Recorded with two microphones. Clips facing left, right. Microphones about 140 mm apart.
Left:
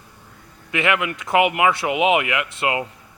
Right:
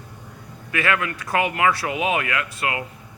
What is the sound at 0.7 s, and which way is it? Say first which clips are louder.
Speech: left 2 dB; 20° left (ahead or behind).